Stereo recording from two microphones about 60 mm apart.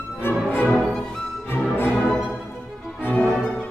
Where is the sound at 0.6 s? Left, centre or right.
Centre.